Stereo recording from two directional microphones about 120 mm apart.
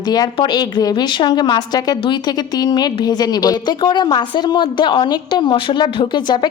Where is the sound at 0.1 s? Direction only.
35° left (ahead or behind).